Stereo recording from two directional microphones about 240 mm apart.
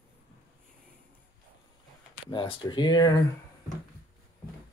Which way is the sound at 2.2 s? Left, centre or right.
Left.